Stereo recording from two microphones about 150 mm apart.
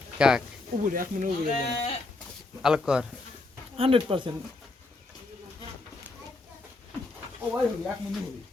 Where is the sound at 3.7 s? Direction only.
40° right (ahead or behind).